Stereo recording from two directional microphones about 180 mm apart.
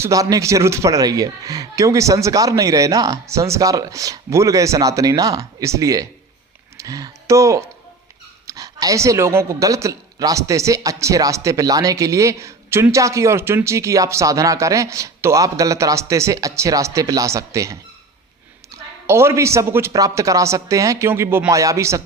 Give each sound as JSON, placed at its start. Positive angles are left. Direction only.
{"t": 0.0, "sound": "speech", "side_deg": -20}
{"t": 18.7, "sound": "a sound", "side_deg": -20}
{"t": 19.0, "sound": "speech", "side_deg": -15}